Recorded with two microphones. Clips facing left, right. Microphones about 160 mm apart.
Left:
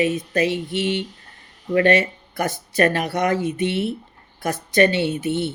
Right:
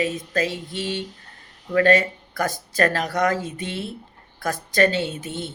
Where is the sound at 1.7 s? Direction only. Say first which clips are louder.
Left 1 dB; 20° left (ahead or behind).